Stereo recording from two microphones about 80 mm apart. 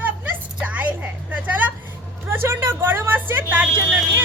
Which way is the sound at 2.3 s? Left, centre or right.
Right.